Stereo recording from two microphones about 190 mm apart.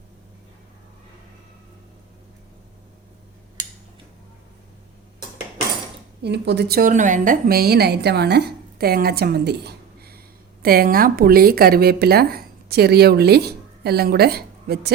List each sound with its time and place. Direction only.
6.2 s a woman's voice: 65° right (ahead or behind)